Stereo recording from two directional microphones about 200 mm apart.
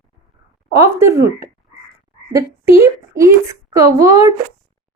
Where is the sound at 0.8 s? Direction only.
15° right (ahead or behind).